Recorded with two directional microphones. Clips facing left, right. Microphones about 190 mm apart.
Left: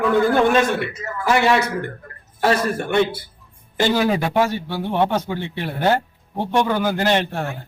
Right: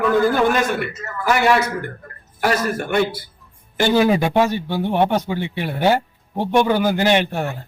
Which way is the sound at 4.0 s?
15° right (ahead or behind).